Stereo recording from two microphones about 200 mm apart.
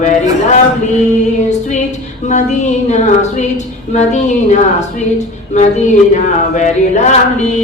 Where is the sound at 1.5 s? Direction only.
35° left (ahead or behind).